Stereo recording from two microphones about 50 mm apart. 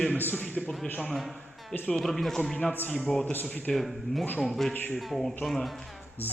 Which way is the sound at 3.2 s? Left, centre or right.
Left.